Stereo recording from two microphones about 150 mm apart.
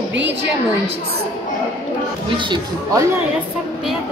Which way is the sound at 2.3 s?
30° right (ahead or behind).